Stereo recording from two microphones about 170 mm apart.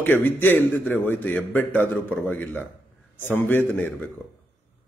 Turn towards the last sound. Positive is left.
turn(degrees=10)  # may be behind; listen again after turning